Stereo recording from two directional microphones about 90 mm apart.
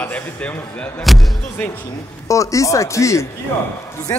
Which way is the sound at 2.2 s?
35° left (ahead or behind).